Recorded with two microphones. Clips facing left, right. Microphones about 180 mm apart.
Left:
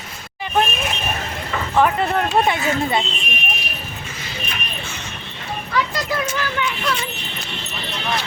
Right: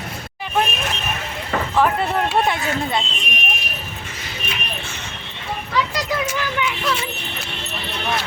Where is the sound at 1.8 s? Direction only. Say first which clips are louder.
Left 2 dB; centre (ahead or behind).